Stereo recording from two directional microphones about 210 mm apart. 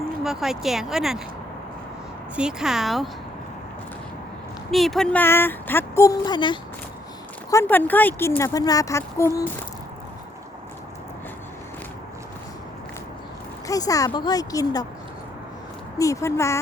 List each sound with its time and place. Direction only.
0.2 s speech: centre (ahead or behind)
2.3 s speech: 5° right (ahead or behind)
4.7 s speech: centre (ahead or behind); by 6.6 s 20° left (ahead or behind)
7.5 s speech: 10° left (ahead or behind)
13.7 s speech: 15° left (ahead or behind)
16.0 s speech: 15° left (ahead or behind)